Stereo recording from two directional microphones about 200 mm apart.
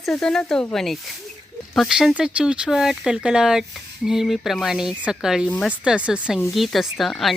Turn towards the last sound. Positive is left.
turn(degrees=0)  # may be behind; listen again after turning